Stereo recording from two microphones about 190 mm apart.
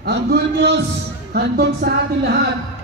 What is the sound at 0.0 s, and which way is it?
Speech, 60° right (ahead or behind).